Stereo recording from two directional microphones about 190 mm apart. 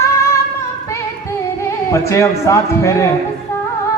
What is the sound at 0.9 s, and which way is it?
Music, 15° left (ahead or behind).